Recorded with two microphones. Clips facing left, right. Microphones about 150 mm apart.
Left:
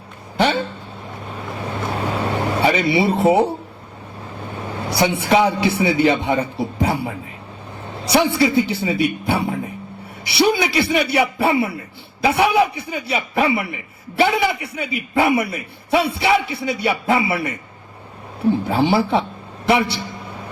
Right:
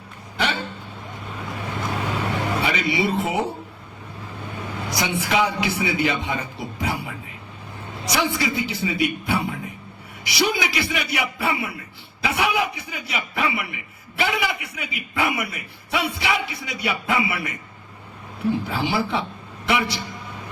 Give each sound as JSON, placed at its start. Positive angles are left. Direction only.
{"t": 0.3, "sound": "a sound", "side_deg": 30}
{"t": 1.9, "sound": "vehicle", "side_deg": 35}
{"t": 3.0, "sound": "a man's voice", "side_deg": 35}
{"t": 4.8, "sound": "a man's voice", "side_deg": 30}